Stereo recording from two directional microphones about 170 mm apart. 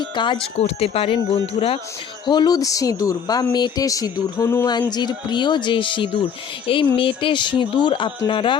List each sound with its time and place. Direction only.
0.0 s speech: 25° left (ahead or behind)
2.2 s speech: 25° left (ahead or behind)